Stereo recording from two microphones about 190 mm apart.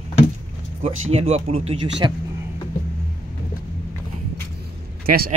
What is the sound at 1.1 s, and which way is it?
Speech, 30° right (ahead or behind).